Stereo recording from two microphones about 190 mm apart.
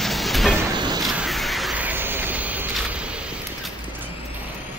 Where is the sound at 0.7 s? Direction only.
25° right (ahead or behind).